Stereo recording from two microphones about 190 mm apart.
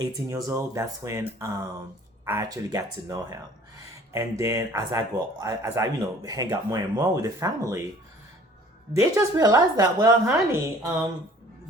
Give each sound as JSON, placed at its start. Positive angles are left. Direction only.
{"t": 0.0, "sound": "speech", "side_deg": -15}
{"t": 8.9, "sound": "speech", "side_deg": -15}